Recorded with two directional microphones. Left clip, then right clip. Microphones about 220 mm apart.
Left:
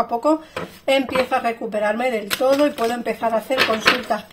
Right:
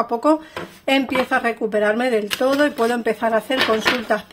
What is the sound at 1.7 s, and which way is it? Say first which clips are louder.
Speech: right 3 dB; 45° right (ahead or behind).